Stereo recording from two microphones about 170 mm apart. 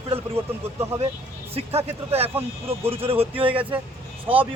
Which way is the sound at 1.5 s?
35° right (ahead or behind).